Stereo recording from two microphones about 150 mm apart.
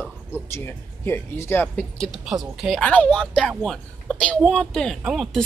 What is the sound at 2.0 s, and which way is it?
Speech, centre (ahead or behind).